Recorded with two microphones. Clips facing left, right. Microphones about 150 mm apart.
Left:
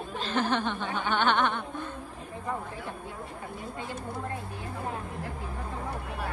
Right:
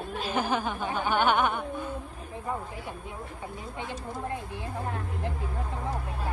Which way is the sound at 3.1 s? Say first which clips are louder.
Even; 20° right (ahead or behind).